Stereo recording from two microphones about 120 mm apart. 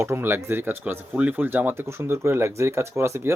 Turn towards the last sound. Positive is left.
turn(degrees=-20)  # may be behind; listen again after turning